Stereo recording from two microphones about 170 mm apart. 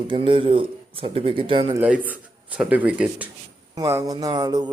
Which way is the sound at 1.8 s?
10° right (ahead or behind).